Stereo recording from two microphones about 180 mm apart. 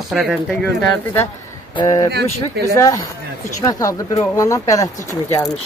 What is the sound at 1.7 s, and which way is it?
Speech, 25° left (ahead or behind).